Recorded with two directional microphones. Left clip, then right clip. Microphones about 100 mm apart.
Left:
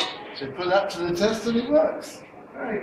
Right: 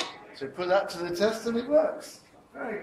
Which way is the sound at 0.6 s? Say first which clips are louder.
Left 3 dB; 30° right (ahead or behind).